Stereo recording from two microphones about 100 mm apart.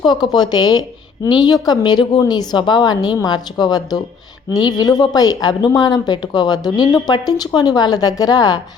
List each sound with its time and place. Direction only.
0.0 s speech: 45° left (ahead or behind)